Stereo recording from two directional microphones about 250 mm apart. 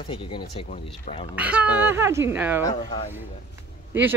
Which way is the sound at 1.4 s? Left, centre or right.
Centre.